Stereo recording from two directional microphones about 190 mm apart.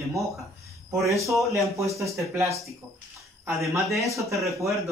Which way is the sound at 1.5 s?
15° right (ahead or behind).